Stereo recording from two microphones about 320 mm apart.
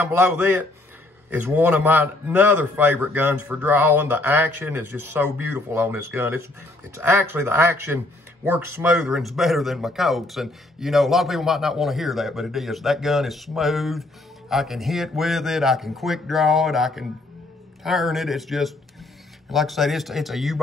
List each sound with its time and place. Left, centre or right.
0.0 s a man's voice: centre